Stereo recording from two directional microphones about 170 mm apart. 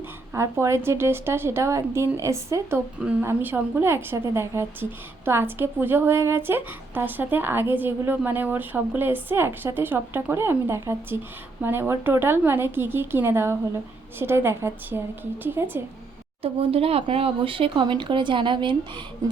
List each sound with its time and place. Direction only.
0.3 s a woman's voice: 15° right (ahead or behind)
16.4 s speech: 35° right (ahead or behind)